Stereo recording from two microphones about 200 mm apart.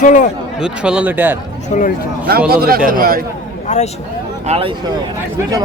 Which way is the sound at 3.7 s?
35° left (ahead or behind).